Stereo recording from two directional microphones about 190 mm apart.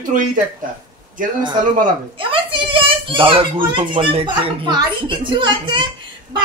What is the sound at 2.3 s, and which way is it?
A child's voice, 25° right (ahead or behind).